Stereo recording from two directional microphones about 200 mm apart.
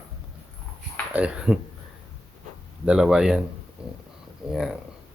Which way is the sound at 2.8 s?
5° right (ahead or behind).